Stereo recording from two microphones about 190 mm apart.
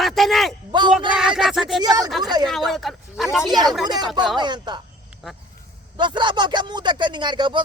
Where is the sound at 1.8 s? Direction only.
20° right (ahead or behind).